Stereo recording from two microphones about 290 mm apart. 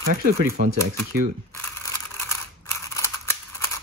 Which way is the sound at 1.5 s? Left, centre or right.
Centre.